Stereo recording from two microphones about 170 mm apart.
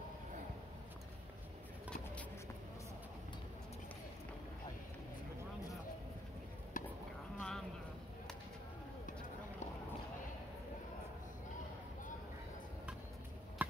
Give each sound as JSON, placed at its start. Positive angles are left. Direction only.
{"t": 6.8, "sound": "a sound", "side_deg": 50}
{"t": 7.3, "sound": "boat", "side_deg": 5}
{"t": 13.6, "sound": "chop", "side_deg": -10}